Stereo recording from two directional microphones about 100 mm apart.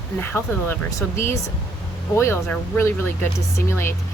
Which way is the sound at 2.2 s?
25° left (ahead or behind).